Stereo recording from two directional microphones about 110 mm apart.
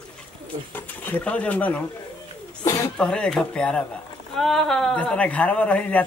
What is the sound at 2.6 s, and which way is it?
Speech, 30° left (ahead or behind).